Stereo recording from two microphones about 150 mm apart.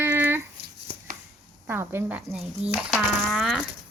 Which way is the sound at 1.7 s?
15° right (ahead or behind).